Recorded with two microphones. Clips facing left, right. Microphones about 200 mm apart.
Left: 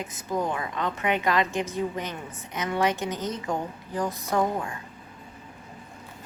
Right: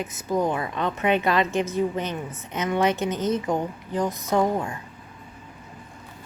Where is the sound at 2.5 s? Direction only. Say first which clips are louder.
Right 3 dB; 20° right (ahead or behind).